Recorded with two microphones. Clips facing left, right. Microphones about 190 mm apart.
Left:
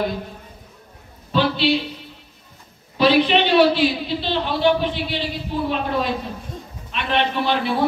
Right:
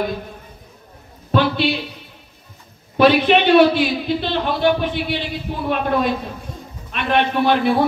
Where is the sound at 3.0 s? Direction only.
55° right (ahead or behind).